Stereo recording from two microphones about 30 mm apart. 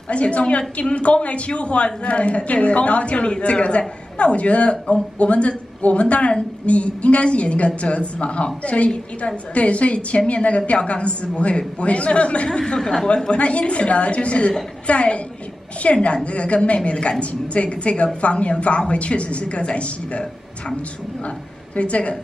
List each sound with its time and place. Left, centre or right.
0.1 s a woman's voice: left
12.4 s speech: left
13.3 s a woman's voice: left
21.7 s a woman's voice: left